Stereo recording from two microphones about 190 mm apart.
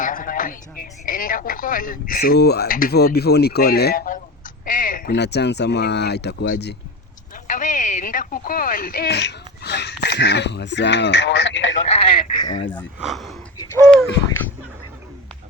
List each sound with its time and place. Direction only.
0.0 s speech: 45° left (ahead or behind)
7.4 s speech: 40° left (ahead or behind); by 11.7 s 75° left (ahead or behind)
11.9 s speech: 25° left (ahead or behind)
13.1 s speech: centre (ahead or behind)